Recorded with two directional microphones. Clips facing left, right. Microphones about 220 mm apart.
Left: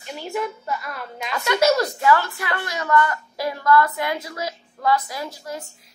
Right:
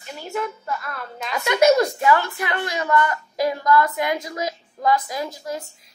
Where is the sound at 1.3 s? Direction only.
20° right (ahead or behind).